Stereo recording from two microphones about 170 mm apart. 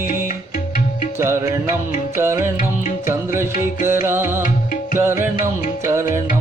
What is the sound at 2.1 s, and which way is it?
Music, 15° right (ahead or behind).